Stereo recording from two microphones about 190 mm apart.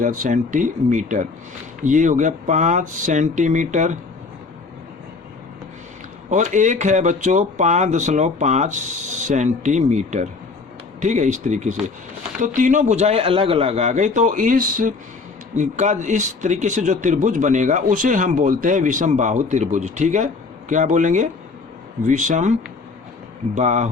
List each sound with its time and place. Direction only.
0.0 s speech: 45° right (ahead or behind)
6.3 s speech: 40° right (ahead or behind)
23.6 s speech: 40° right (ahead or behind)